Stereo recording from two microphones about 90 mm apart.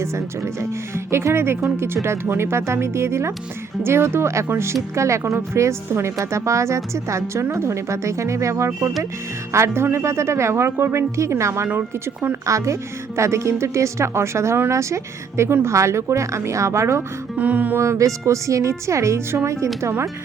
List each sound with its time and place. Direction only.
0.0 s speech: 30° right (ahead or behind)
17.3 s music: 15° right (ahead or behind)
17.7 s speech: 35° right (ahead or behind)